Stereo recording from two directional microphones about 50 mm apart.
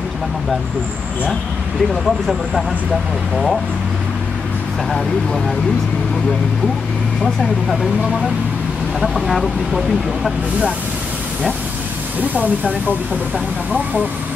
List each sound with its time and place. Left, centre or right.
2.0 s speech: centre
7.7 s speech: centre
12.2 s speech: right